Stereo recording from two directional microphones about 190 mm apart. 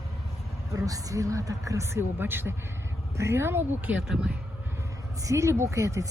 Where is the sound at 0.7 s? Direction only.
15° right (ahead or behind).